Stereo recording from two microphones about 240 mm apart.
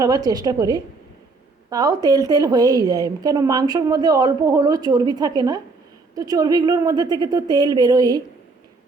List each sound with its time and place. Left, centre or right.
0.0 s a woman's voice: centre